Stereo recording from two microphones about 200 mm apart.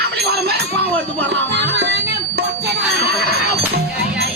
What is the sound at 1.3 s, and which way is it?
Music, 55° right (ahead or behind).